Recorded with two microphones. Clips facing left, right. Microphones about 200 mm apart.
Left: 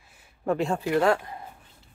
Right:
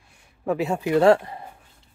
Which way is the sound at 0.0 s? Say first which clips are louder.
Right 1 dB; 5° left (ahead or behind).